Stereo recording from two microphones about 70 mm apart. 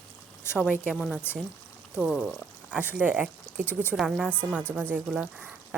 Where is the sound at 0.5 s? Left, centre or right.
Centre.